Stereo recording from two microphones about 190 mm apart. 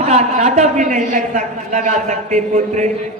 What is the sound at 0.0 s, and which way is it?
A man's voice, 35° right (ahead or behind).